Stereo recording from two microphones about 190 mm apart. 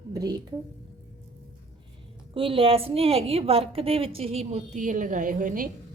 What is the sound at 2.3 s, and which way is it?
A woman's voice, 30° right (ahead or behind).